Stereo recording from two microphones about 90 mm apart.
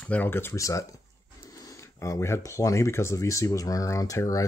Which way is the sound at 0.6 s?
35° left (ahead or behind).